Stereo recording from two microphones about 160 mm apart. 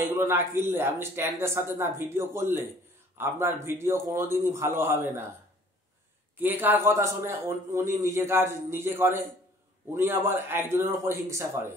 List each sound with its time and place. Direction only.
0.0 s a man's voice: 15° right (ahead or behind)
6.3 s a man's voice: 10° right (ahead or behind)